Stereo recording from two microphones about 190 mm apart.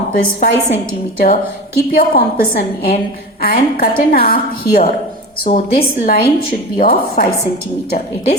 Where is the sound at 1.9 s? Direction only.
50° left (ahead or behind).